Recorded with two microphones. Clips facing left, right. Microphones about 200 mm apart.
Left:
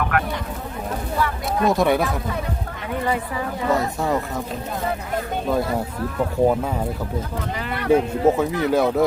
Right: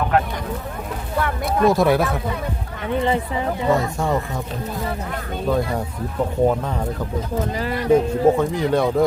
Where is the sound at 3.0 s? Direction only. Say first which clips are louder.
Right 2 dB; 25° right (ahead or behind).